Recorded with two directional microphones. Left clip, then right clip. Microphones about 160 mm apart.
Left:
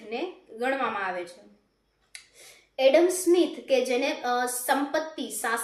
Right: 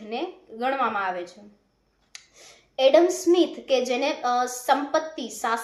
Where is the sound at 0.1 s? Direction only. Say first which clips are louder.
Right 2 dB; 20° left (ahead or behind).